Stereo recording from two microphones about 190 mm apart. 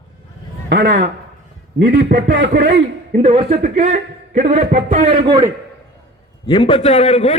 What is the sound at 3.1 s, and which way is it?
A man's voice, 30° right (ahead or behind).